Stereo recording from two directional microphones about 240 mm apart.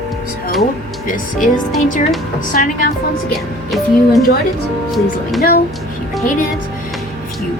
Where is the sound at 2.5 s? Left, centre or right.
Left.